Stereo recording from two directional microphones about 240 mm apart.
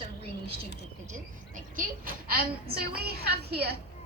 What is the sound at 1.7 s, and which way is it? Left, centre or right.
A woman's voice, right.